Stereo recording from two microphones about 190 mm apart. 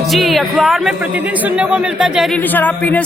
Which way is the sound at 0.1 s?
Centre (ahead or behind).